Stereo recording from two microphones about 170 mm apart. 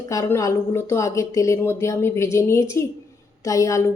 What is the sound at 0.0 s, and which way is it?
Speech, 20° left (ahead or behind).